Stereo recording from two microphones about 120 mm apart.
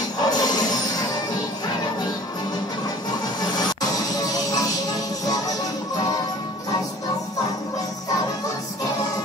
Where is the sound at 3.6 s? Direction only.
35° left (ahead or behind).